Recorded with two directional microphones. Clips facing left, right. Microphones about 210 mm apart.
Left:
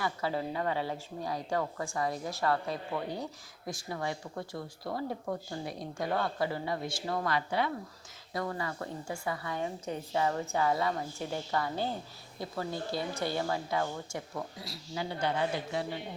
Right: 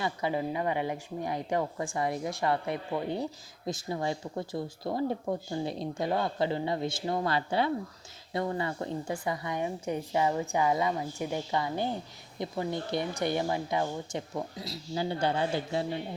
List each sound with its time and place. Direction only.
0.0 s a woman's voice: 15° right (ahead or behind)